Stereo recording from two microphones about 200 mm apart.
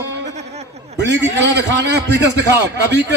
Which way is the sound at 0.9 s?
60° right (ahead or behind).